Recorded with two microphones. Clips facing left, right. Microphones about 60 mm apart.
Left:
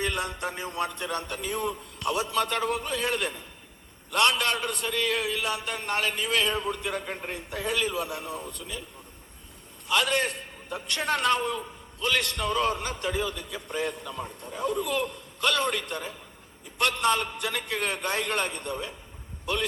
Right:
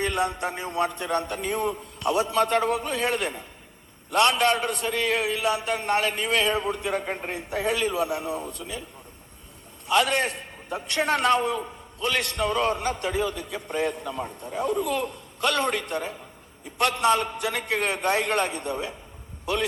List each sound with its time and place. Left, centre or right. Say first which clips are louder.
0.0 s a man's voice: right 4 dB; right
7.3 s a man's voice: right 3 dB; right
9.9 s a man's voice: right 3 dB; right